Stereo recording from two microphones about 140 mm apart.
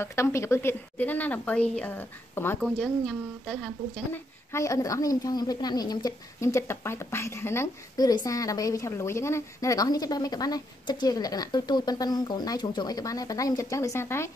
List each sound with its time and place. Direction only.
0.0 s a woman's voice: 20° left (ahead or behind)
2.6 s speech: 5° left (ahead or behind)
4.1 s a woman's voice: 20° left (ahead or behind)